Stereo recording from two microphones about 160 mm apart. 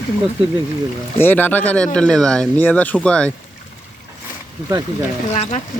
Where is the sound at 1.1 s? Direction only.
10° left (ahead or behind).